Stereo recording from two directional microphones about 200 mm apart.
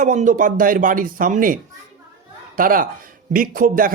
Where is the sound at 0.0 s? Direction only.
40° right (ahead or behind).